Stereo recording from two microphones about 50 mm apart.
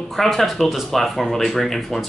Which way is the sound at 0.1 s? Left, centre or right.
Centre.